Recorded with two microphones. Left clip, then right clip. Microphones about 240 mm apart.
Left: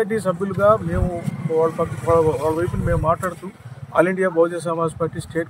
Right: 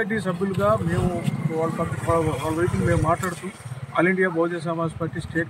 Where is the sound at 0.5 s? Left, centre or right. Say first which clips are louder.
Left 6 dB; left.